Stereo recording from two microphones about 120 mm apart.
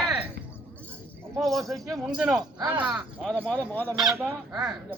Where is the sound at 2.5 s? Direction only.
40° right (ahead or behind).